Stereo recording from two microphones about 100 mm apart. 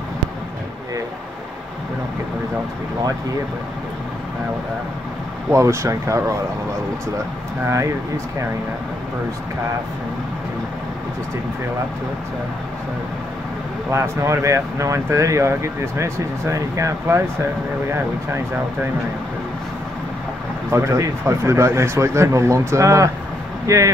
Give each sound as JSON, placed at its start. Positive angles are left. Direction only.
{"t": 5.5, "sound": "speech", "side_deg": -30}
{"t": 7.6, "sound": "speech", "side_deg": -30}
{"t": 13.9, "sound": "speech", "side_deg": -25}
{"t": 20.7, "sound": "speech", "side_deg": -30}